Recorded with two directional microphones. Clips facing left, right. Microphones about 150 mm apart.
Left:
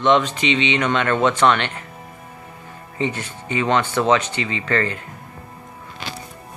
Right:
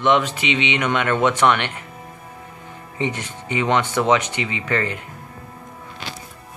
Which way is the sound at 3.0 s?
15° right (ahead or behind).